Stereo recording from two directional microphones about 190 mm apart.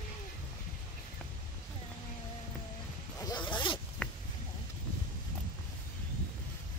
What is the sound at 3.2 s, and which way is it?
Zipper, 20° left (ahead or behind).